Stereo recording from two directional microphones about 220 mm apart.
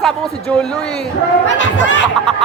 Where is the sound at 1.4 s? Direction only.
55° left (ahead or behind).